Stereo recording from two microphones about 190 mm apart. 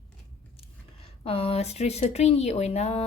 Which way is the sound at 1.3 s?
30° left (ahead or behind).